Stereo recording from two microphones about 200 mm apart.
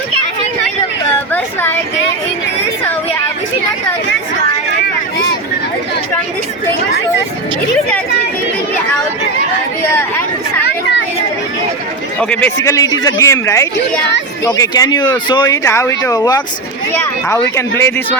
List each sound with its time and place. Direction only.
9.9 s chatter: 10° left (ahead or behind)
12.2 s speech: 5° left (ahead or behind)
17.5 s speech: 15° left (ahead or behind)